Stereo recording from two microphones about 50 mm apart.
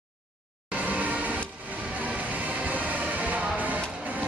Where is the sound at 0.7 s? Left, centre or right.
Right.